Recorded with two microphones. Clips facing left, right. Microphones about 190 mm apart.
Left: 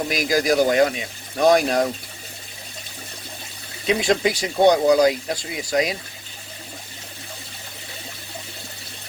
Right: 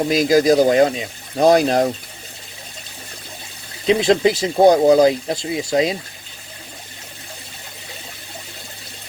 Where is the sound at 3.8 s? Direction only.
25° right (ahead or behind).